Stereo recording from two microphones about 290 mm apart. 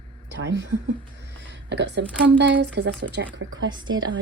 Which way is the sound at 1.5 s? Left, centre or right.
Right.